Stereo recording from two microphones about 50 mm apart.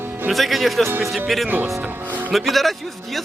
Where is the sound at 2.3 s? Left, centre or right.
Centre.